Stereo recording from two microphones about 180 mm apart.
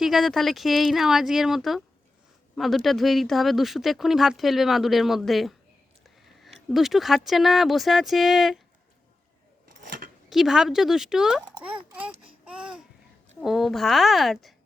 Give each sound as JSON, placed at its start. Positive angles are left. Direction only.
{"t": 0.0, "sound": "speech", "side_deg": 0}
{"t": 9.8, "sound": "scissors", "side_deg": -50}
{"t": 10.2, "sound": "speech", "side_deg": 0}
{"t": 12.5, "sound": "babbling", "side_deg": -5}
{"t": 13.4, "sound": "speech", "side_deg": 0}